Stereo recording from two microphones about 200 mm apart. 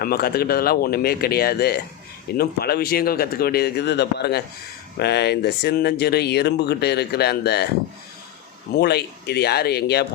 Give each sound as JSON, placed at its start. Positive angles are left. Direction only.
{"t": 0.0, "sound": "a man's voice", "side_deg": 50}
{"t": 8.8, "sound": "a man's voice", "side_deg": 55}